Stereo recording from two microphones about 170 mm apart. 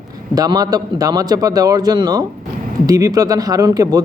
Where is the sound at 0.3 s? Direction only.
20° right (ahead or behind).